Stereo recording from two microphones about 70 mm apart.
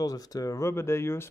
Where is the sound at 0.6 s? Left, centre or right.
Left.